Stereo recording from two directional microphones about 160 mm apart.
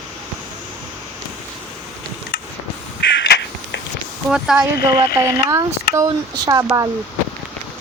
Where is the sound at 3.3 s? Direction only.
90° left.